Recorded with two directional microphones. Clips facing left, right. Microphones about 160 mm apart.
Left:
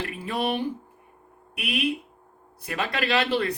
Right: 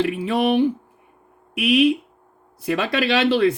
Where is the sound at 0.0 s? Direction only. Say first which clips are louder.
Right 8 dB; 90° right.